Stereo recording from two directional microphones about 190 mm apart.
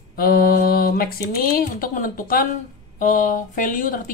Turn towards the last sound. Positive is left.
turn(degrees=45)  # may be behind; listen again after turning